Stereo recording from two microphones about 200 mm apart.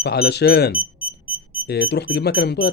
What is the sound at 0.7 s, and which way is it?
Smoke detector, 25° left (ahead or behind).